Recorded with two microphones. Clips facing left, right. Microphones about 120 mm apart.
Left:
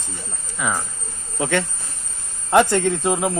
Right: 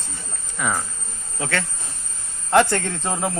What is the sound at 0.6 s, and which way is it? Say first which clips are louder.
Speech: even; centre (ahead or behind).